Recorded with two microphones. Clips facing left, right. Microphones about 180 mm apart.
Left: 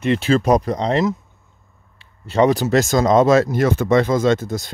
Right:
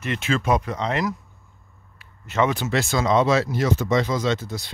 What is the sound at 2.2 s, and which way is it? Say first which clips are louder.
Speech: left 7 dB; 35° left (ahead or behind).